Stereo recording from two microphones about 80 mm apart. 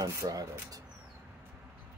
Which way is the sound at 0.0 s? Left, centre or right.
Right.